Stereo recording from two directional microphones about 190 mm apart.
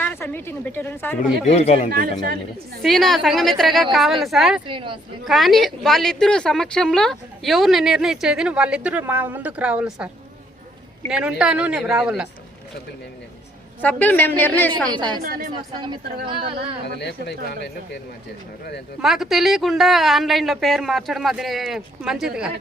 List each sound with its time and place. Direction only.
0.0 s a woman's voice: 10° left (ahead or behind)
1.2 s speech: 35° left (ahead or behind)
2.8 s a woman's voice: centre (ahead or behind)
4.6 s speech: 25° right (ahead or behind)
5.2 s a woman's voice: centre (ahead or behind)
11.1 s a woman's voice: 5° right (ahead or behind)
13.8 s a woman's voice: 10° left (ahead or behind)
16.2 s speech: 25° right (ahead or behind)
16.8 s speech: 65° left (ahead or behind)
19.0 s a woman's voice: centre (ahead or behind)